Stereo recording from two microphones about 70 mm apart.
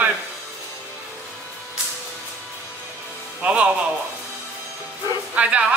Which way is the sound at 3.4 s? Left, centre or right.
Centre.